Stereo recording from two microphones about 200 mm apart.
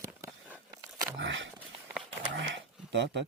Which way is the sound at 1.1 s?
65° right (ahead or behind).